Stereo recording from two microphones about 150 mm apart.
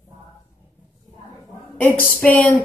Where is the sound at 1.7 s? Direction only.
10° left (ahead or behind).